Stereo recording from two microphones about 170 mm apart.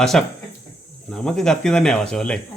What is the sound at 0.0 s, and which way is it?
Speech, centre (ahead or behind).